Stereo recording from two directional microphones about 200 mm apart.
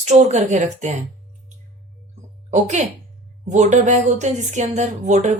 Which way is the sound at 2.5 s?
35° right (ahead or behind).